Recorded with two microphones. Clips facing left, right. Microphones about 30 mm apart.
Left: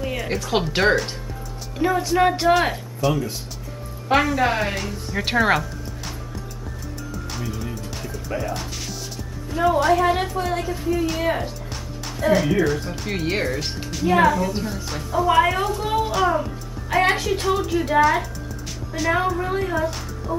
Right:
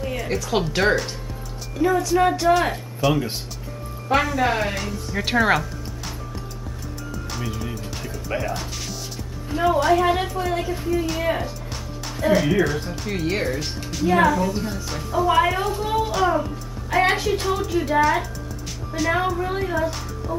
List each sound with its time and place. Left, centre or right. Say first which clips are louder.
0.0 s speech: even; centre
3.0 s speech: right 1 dB; centre
7.4 s music: even; centre
8.4 s a woman's voice: even; centre
13.1 s speech: even; centre